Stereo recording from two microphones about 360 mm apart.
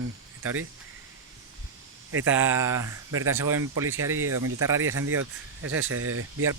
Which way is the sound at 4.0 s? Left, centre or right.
Right.